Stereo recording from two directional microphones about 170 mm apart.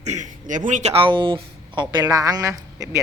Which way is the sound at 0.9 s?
30° right (ahead or behind).